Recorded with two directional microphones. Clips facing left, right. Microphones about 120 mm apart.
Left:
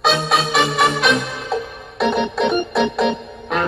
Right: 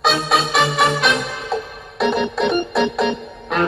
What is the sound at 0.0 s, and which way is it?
Music, centre (ahead or behind).